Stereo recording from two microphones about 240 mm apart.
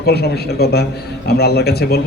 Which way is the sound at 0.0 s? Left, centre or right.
Left.